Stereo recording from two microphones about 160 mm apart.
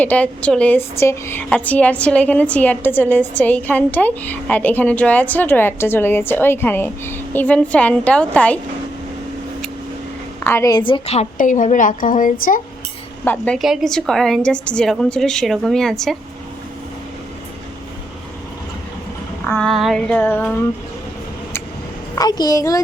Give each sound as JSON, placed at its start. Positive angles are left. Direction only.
{"t": 0.0, "sound": "a woman's voice", "side_deg": 10}
{"t": 10.4, "sound": "a woman's voice", "side_deg": 15}
{"t": 13.2, "sound": "a woman's voice", "side_deg": 10}
{"t": 19.5, "sound": "a woman's voice", "side_deg": 5}
{"t": 22.1, "sound": "a woman's voice", "side_deg": 25}